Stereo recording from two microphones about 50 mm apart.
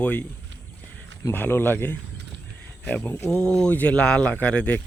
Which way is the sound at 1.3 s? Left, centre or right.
Left.